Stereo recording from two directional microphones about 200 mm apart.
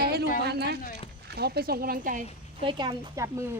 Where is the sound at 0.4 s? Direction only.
55° right (ahead or behind).